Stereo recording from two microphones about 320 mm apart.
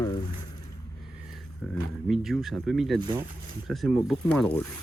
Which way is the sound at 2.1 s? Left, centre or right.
Centre.